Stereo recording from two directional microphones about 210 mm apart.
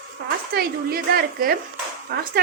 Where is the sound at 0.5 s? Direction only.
45° right (ahead or behind).